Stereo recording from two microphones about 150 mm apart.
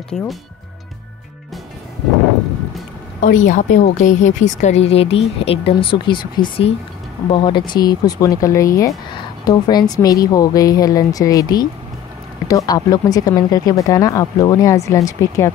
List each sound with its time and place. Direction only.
0.1 s speech: 5° left (ahead or behind)
3.2 s a woman's voice: 60° left (ahead or behind); by 15.5 s 20° left (ahead or behind)